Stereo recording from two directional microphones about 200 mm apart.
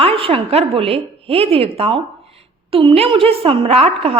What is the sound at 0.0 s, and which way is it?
A woman's voice, 25° right (ahead or behind).